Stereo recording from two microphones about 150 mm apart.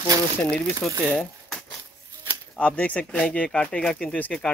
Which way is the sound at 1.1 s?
5° left (ahead or behind).